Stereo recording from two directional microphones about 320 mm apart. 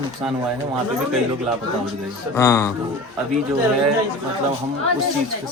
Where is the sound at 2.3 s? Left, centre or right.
Centre.